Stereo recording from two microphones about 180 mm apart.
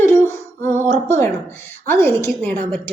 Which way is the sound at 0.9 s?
40° right (ahead or behind).